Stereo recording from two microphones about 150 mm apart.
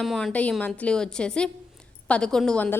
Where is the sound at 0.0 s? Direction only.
Centre (ahead or behind).